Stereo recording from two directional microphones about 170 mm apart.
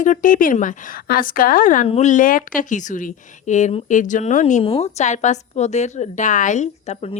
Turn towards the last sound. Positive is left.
turn(degrees=40)  # may be behind; listen again after turning